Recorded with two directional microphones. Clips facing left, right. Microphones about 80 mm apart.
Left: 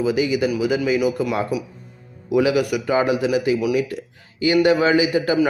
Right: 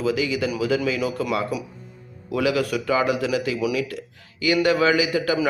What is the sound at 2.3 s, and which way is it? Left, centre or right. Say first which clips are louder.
A man's voice: left 4 dB; centre.